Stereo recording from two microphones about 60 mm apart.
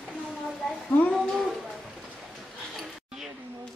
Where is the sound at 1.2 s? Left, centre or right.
Centre.